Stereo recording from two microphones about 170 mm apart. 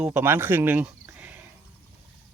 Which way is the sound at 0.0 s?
10° right (ahead or behind).